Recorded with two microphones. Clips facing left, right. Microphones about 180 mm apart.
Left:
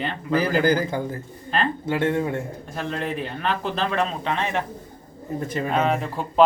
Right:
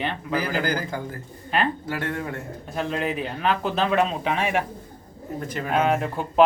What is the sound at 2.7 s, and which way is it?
Speech, 5° right (ahead or behind).